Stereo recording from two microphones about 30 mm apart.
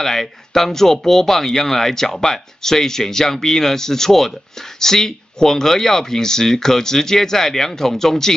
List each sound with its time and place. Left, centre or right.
0.0 s speech: centre